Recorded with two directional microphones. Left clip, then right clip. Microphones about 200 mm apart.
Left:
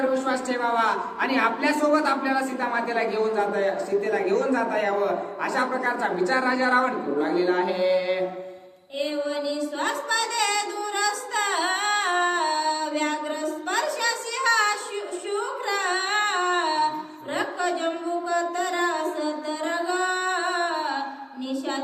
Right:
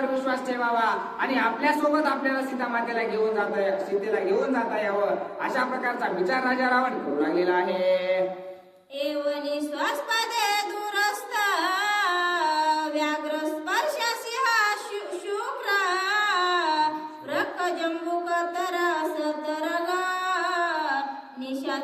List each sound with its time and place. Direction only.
0.8 s a woman's voice: 15° left (ahead or behind)
5.4 s a woman's voice: 15° left (ahead or behind)
9.0 s music: 15° right (ahead or behind)
13.7 s a sound: 15° right (ahead or behind)
15.7 s music: 15° right (ahead or behind)